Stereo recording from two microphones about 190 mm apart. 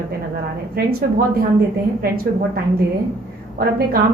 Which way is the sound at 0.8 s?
55° right (ahead or behind).